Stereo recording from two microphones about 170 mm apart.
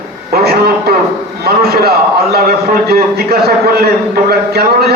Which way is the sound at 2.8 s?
65° right (ahead or behind).